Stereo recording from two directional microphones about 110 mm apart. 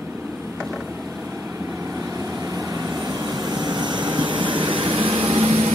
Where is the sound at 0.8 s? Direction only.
20° right (ahead or behind).